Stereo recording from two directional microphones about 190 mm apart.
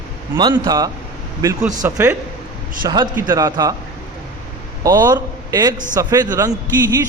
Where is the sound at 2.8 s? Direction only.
25° right (ahead or behind).